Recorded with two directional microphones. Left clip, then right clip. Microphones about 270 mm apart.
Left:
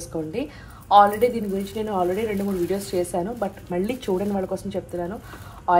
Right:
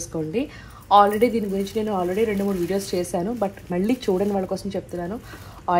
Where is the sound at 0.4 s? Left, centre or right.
Right.